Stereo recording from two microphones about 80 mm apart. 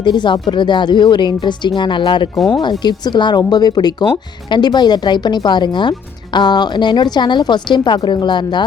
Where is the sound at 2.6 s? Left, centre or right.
Left.